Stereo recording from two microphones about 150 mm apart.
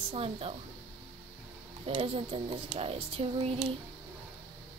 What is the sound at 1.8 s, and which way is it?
Speech, 40° right (ahead or behind).